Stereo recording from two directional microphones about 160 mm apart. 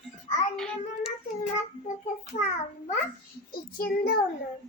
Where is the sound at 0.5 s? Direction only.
5° left (ahead or behind).